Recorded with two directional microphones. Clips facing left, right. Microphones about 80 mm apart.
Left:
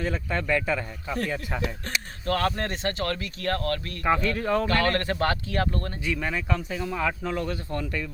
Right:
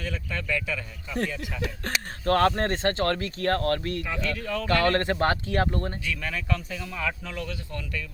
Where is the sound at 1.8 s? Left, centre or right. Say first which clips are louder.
Right 2 dB; right.